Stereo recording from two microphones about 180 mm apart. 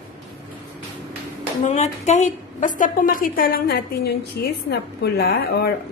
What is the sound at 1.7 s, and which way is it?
A woman's voice, 40° left (ahead or behind).